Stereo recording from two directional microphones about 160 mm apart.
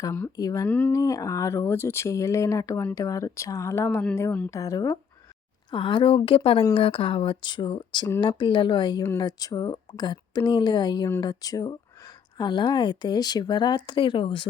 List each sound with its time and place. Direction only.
0.0 s speech: 20° left (ahead or behind)
0.7 s speech: 10° left (ahead or behind)
5.7 s speech: 30° left (ahead or behind)